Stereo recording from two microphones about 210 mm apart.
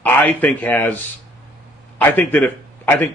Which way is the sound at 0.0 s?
10° left (ahead or behind).